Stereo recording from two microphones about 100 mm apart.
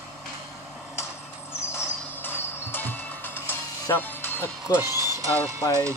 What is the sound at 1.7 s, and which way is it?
Music, 20° left (ahead or behind).